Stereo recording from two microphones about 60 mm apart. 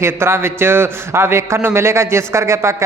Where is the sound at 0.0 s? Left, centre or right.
Right.